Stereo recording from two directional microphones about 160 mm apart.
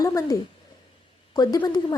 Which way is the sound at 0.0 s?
20° left (ahead or behind).